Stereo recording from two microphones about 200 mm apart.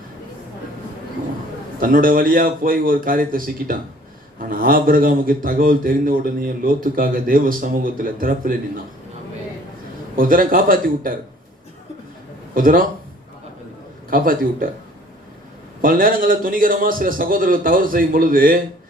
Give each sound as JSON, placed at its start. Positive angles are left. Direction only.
{"t": 1.8, "sound": "a man's voice", "side_deg": -45}
{"t": 10.2, "sound": "a man's voice", "side_deg": -45}
{"t": 12.5, "sound": "a man's voice", "side_deg": -45}
{"t": 14.1, "sound": "a man's voice", "side_deg": -45}
{"t": 15.8, "sound": "a man's voice", "side_deg": -45}